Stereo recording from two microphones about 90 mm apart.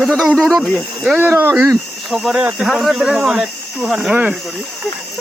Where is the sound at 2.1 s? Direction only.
Centre (ahead or behind).